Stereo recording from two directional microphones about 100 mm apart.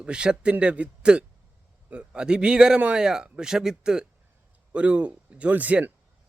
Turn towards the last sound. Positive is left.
turn(degrees=-15)  # may be behind; listen again after turning